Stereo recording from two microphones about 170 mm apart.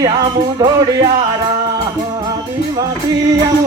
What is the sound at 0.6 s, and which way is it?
Music, 20° right (ahead or behind).